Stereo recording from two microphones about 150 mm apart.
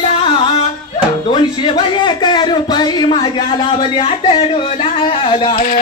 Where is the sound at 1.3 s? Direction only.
35° left (ahead or behind).